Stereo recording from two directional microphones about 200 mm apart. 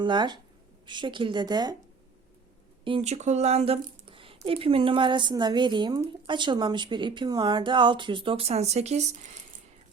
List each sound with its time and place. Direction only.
0.0 s speech: 20° right (ahead or behind)
2.8 s speech: 30° right (ahead or behind)